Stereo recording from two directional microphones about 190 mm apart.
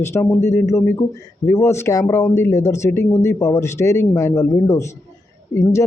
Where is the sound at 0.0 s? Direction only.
15° left (ahead or behind).